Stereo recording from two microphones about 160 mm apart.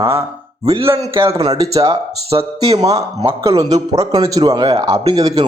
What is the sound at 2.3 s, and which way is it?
Speech, 40° right (ahead or behind).